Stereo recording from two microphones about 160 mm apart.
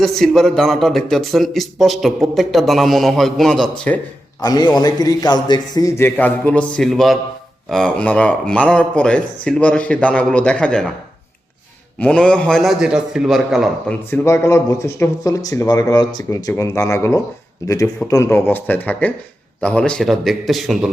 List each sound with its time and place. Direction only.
0.0 s a man's voice: centre (ahead or behind)
4.4 s a man's voice: 25° left (ahead or behind); by 10.9 s 5° left (ahead or behind)
11.9 s a man's voice: 5° left (ahead or behind)
14.1 s a man's voice: 15° left (ahead or behind); by 20.9 s centre (ahead or behind)